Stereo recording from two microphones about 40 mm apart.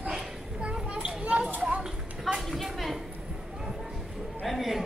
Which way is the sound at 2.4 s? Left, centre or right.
Centre.